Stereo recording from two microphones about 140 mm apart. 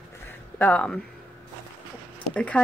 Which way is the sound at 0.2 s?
15° left (ahead or behind).